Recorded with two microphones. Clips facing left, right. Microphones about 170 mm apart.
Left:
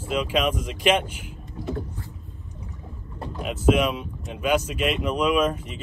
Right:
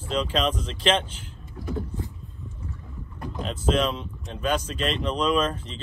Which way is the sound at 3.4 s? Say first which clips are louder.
Left 3 dB; 10° left (ahead or behind).